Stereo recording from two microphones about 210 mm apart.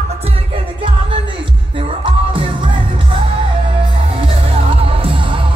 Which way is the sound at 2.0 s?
25° right (ahead or behind).